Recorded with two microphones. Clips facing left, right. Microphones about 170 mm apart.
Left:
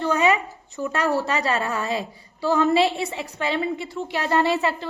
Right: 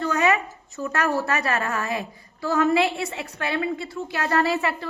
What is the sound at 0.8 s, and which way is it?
A woman's voice, 15° left (ahead or behind).